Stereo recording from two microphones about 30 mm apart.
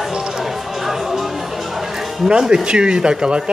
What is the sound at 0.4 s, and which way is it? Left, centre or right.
Music, centre.